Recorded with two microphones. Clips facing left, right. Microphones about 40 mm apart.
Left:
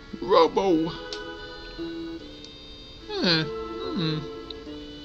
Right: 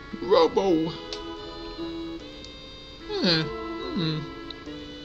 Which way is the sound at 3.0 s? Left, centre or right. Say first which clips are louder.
Even; centre.